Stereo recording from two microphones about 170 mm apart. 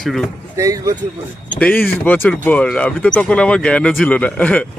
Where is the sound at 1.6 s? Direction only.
10° left (ahead or behind).